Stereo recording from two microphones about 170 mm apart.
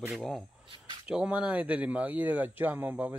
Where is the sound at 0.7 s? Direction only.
30° right (ahead or behind).